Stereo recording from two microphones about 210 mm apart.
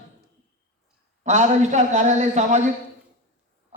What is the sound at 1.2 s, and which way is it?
A man's voice, 35° right (ahead or behind).